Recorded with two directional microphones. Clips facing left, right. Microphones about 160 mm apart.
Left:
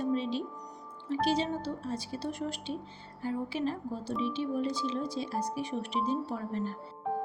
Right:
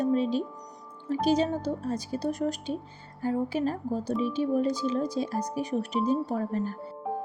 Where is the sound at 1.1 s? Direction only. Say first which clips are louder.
Right 5 dB; 45° right (ahead or behind).